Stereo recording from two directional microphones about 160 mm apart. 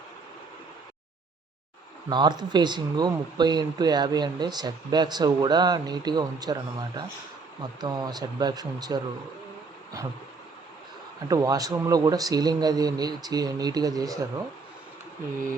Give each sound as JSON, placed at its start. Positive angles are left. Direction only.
{"t": 2.0, "sound": "speech", "side_deg": -25}
{"t": 11.3, "sound": "speech", "side_deg": -20}